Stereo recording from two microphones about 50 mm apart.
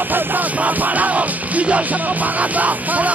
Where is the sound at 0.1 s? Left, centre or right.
Right.